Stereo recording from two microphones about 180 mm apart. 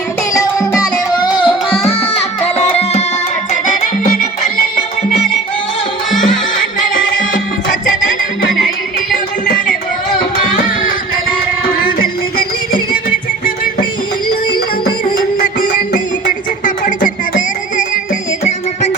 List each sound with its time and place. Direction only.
0.3 s music: 20° left (ahead or behind); by 3.0 s 35° left (ahead or behind)
3.7 s music: 50° left (ahead or behind)
11.8 s music: 50° left (ahead or behind)
16.6 s music: 50° left (ahead or behind)